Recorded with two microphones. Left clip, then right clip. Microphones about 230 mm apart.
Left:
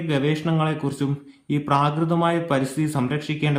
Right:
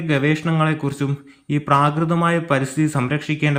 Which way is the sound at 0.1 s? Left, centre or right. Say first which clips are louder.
Right 4 dB; centre.